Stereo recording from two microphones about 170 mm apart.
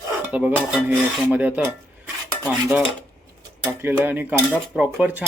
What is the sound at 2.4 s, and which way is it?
Speech, 5° right (ahead or behind).